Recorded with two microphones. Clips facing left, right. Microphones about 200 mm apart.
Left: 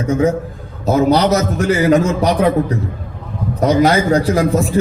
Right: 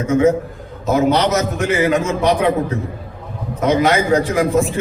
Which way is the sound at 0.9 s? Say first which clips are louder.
Left 2 dB; 35° left (ahead or behind).